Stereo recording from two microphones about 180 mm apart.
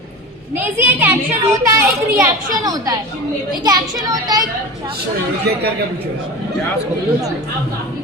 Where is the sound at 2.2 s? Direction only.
20° right (ahead or behind).